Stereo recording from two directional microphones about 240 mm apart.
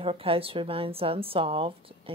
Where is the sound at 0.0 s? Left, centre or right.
Right.